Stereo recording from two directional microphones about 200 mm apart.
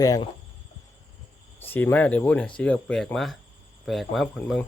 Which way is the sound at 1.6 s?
10° left (ahead or behind).